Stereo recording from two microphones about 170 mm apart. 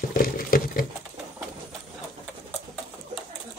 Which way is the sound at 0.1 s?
55° left (ahead or behind).